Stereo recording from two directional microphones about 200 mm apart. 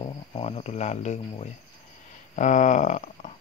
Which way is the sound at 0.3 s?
30° left (ahead or behind).